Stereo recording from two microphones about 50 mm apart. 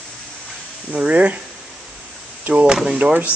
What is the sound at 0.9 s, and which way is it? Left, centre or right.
Speech, right.